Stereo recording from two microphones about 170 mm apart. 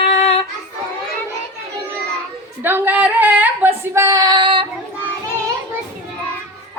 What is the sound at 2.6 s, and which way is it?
Speech, 10° right (ahead or behind).